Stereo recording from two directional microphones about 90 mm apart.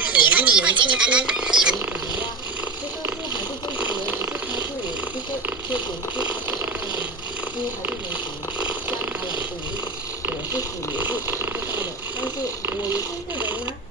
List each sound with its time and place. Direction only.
0.0 s a sound: 15° right (ahead or behind)
0.8 s speech: 10° right (ahead or behind)
5.7 s purr: 15° right (ahead or behind)
8.5 s purr: 15° right (ahead or behind)
11.0 s speech: 20° right (ahead or behind)